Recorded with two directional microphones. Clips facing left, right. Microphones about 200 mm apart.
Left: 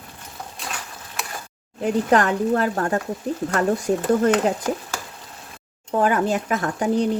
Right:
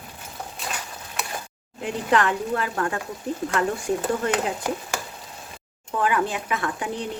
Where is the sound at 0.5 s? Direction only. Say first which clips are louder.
Even; centre (ahead or behind).